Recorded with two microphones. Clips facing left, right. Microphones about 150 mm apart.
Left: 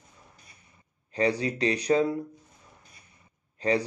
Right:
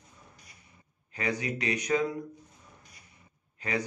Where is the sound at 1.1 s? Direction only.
35° left (ahead or behind).